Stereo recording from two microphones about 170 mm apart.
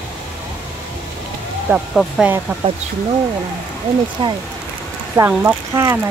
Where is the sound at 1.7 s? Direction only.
Centre (ahead or behind).